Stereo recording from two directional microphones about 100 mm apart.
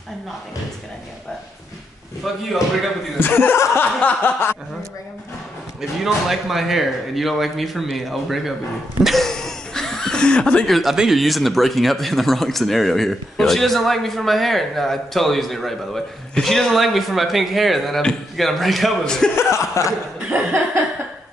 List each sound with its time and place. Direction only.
2.3 s speech: centre (ahead or behind)
3.2 s speech: 20° left (ahead or behind)
5.8 s speech: 5° right (ahead or behind)
19.3 s speech: 30° left (ahead or behind)
20.2 s a sound: 20° right (ahead or behind)